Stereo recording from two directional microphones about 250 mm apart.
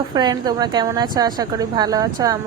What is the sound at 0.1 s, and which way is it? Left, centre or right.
A woman's voice, centre.